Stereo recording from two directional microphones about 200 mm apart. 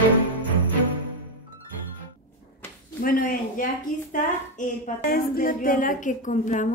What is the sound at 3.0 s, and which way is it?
A woman's voice, 45° left (ahead or behind).